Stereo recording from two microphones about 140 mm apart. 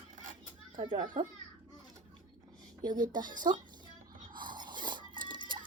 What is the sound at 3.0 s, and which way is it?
Speech, 70° right (ahead or behind).